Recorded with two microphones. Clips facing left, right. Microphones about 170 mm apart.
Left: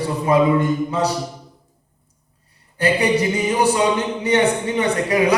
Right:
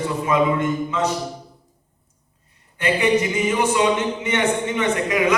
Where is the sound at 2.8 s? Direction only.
35° left (ahead or behind).